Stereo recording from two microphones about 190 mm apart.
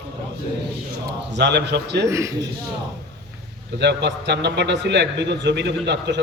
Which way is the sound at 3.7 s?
65° right (ahead or behind).